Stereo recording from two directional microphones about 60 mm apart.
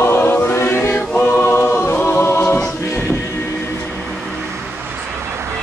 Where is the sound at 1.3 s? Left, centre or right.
Left.